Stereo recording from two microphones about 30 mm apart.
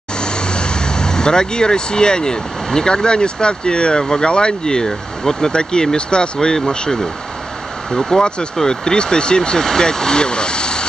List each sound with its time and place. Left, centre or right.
0.2 s speech: left
4.3 s speech: left